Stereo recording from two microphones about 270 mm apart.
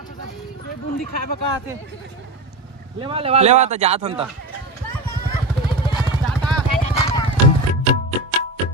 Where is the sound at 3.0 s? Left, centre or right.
Centre.